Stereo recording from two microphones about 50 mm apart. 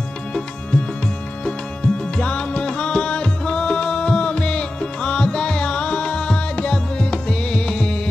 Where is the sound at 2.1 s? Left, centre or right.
Left.